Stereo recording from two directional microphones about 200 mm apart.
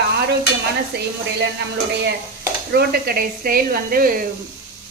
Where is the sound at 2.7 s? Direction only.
50° right (ahead or behind).